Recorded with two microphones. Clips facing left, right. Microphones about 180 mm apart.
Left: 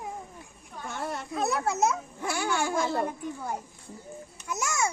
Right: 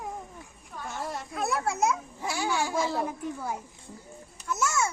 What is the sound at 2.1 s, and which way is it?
Speech, 55° left (ahead or behind).